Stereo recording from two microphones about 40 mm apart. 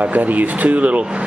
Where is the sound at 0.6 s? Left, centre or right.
Right.